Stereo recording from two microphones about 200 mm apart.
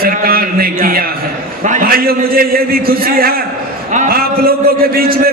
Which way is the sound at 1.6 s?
40° right (ahead or behind).